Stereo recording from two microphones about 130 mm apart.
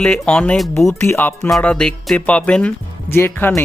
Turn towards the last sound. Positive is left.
turn(degrees=15)  # may be behind; listen again after turning